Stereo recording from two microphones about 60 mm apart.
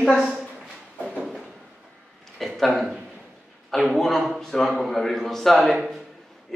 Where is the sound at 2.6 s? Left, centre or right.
Centre.